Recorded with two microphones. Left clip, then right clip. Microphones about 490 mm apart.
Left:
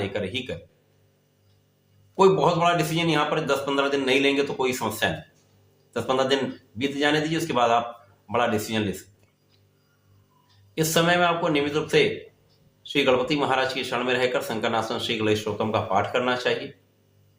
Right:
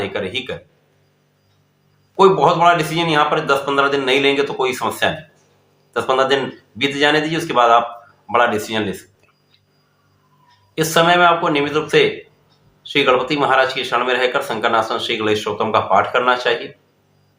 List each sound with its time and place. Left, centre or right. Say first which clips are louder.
0.0 s speech: right 6 dB; left
2.1 s speech: right 7 dB; left
10.8 s speech: right 8 dB; left